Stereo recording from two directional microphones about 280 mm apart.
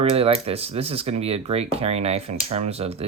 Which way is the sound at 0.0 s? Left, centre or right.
Centre.